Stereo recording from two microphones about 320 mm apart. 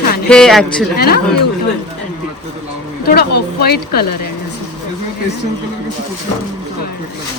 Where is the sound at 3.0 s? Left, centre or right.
Left.